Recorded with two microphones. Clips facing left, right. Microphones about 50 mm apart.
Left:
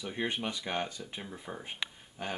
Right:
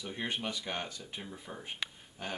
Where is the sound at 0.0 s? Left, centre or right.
Centre.